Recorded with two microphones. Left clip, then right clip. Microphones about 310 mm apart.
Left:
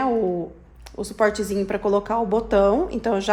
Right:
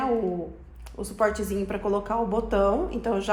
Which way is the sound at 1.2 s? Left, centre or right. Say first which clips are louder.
Left 4 dB; left.